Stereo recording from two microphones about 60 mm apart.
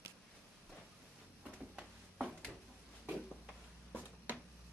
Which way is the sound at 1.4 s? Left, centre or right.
Centre.